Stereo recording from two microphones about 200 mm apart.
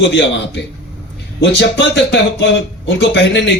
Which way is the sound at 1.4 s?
60° left (ahead or behind).